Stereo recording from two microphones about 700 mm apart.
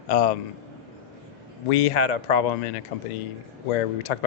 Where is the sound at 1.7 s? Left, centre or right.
Left.